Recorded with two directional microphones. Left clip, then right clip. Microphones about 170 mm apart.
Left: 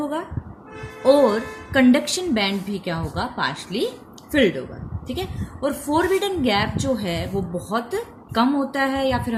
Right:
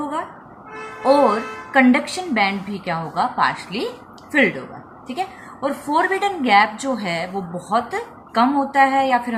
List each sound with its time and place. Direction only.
1.0 s a woman's voice: 50° left (ahead or behind)